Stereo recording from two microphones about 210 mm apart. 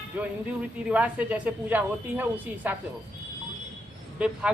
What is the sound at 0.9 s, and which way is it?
A woman's voice, 5° right (ahead or behind).